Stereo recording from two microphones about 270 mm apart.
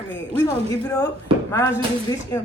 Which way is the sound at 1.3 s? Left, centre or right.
Centre.